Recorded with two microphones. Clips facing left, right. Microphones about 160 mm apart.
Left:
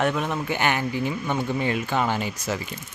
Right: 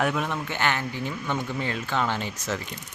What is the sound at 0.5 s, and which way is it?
Speech, 15° left (ahead or behind).